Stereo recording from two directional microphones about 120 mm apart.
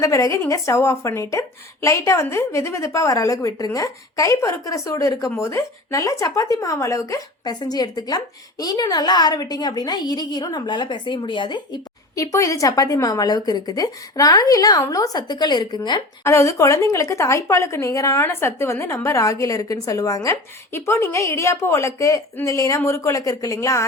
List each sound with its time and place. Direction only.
0.0 s a woman's voice: 25° left (ahead or behind)
16.2 s a woman's voice: 25° left (ahead or behind)